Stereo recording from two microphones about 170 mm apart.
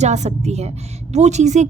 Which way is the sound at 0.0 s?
40° right (ahead or behind).